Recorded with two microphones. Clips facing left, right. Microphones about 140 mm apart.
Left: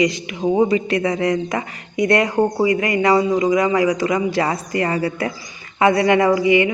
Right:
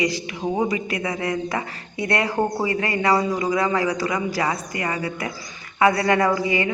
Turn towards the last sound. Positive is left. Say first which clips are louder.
# left 6 dB
turn(degrees=20)  # may be behind; listen again after turning